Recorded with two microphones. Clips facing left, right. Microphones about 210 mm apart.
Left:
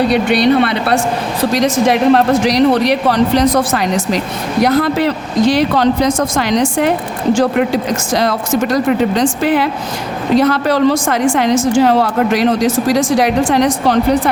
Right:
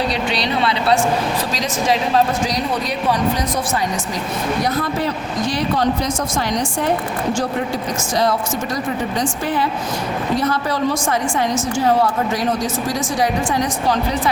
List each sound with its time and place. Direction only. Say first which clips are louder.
0.1 s a woman's voice: left 10 dB; 60° left (ahead or behind)